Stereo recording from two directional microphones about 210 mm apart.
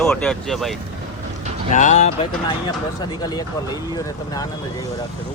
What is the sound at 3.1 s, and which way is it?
Speech, 20° left (ahead or behind).